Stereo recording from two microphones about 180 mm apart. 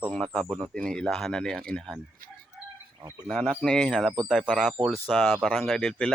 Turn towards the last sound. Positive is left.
turn(degrees=5)  # may be behind; listen again after turning